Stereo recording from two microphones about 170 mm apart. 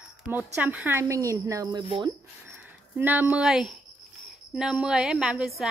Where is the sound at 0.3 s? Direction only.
10° right (ahead or behind); by 2.0 s 25° right (ahead or behind).